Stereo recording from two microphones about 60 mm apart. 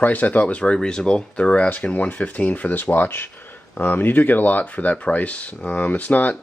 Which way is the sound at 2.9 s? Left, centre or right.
Left.